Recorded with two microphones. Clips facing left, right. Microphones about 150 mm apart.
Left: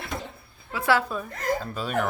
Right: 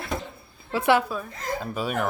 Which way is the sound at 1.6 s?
10° right (ahead or behind).